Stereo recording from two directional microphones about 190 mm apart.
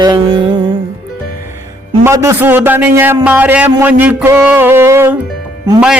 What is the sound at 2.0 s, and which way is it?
A man's voice, 15° right (ahead or behind).